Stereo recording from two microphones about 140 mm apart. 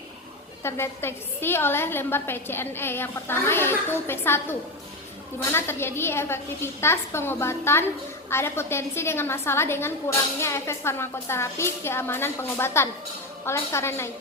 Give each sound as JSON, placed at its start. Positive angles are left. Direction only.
{"t": 0.6, "sound": "a woman's voice", "side_deg": 15}